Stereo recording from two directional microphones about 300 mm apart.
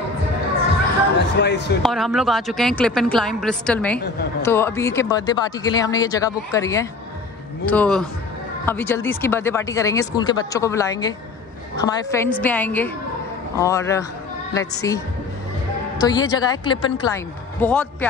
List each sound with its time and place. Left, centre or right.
1.1 s a sound: left
1.8 s a woman's voice: centre
16.0 s speech: centre